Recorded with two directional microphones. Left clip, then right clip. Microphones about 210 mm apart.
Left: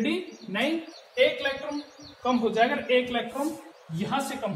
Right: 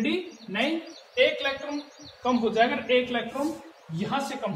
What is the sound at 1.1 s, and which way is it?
Speech, 15° right (ahead or behind).